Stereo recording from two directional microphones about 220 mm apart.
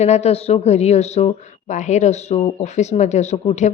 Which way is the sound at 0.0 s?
30° left (ahead or behind).